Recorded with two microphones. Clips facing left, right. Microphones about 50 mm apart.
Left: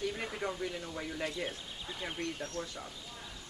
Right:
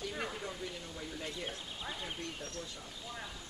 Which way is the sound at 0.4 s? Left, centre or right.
Left.